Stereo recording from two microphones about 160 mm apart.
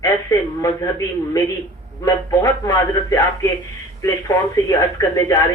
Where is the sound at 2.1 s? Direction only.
20° left (ahead or behind).